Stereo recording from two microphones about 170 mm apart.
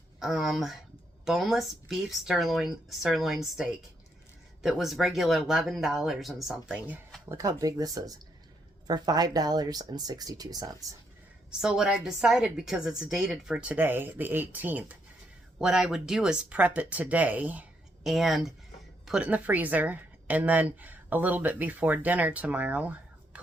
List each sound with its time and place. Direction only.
0.2 s a woman's voice: centre (ahead or behind)
7.3 s speech: 20° right (ahead or behind)
11.6 s a woman's voice: 5° right (ahead or behind)